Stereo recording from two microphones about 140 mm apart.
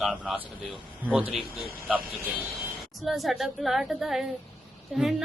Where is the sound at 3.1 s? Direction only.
Centre (ahead or behind).